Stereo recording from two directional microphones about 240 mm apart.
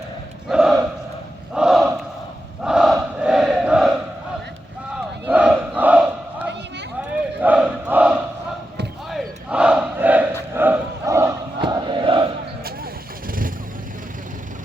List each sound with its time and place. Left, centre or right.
0.4 s battle cry: centre
2.6 s crowd: centre
4.9 s battle cry: centre
7.4 s crowd: centre
12.6 s vehicle: right